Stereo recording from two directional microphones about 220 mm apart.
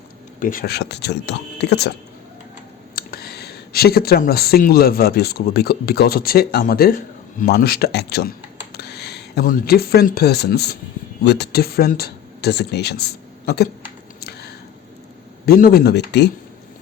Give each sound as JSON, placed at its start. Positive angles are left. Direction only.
{"t": 0.3, "sound": "speech", "side_deg": 40}
{"t": 2.9, "sound": "speech", "side_deg": 45}
{"t": 14.2, "sound": "a sound", "side_deg": 45}
{"t": 15.4, "sound": "speech", "side_deg": 40}